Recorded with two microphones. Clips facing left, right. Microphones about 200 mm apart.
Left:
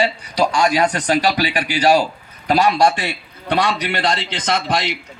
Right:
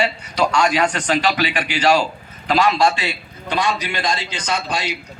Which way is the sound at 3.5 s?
60° left (ahead or behind).